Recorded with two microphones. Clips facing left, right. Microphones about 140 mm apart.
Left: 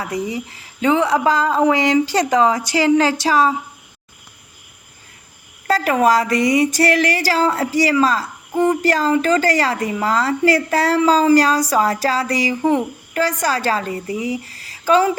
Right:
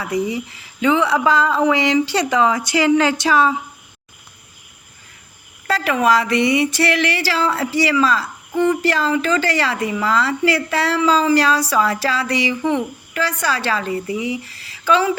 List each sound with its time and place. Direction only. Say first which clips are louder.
0.0 s speech: right 2 dB; 35° left (ahead or behind)
5.6 s speech: left 2 dB; 40° left (ahead or behind)